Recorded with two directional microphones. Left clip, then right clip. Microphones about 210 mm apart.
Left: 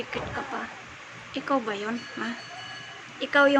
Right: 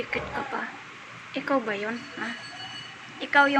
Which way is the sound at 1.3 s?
5° left (ahead or behind).